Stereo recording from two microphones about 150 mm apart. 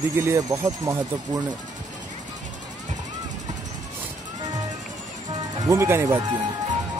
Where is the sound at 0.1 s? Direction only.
20° right (ahead or behind).